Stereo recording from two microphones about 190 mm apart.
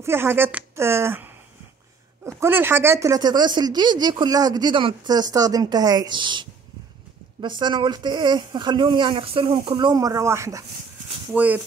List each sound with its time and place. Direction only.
0.0 s speech: 10° right (ahead or behind)
2.4 s speech: 10° right (ahead or behind)
7.4 s speech: 25° right (ahead or behind); by 11.6 s 10° right (ahead or behind)